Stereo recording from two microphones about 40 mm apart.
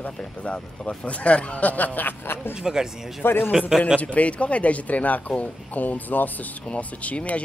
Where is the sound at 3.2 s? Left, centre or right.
Left.